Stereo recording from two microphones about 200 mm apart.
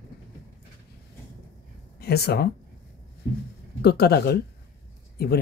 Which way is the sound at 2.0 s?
55° left (ahead or behind).